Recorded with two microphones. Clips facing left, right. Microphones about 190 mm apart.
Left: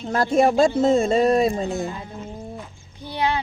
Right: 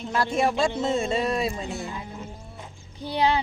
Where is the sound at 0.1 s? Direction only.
40° left (ahead or behind).